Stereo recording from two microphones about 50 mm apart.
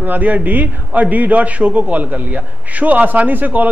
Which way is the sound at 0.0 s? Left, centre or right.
Right.